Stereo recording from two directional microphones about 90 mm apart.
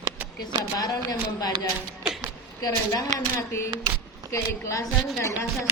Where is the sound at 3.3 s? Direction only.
30° left (ahead or behind).